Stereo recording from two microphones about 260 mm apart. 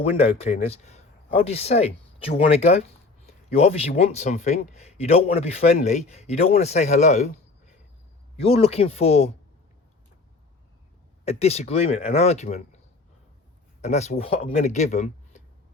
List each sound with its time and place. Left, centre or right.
0.0 s speech: left
8.4 s speech: left
11.3 s speech: left
13.8 s speech: left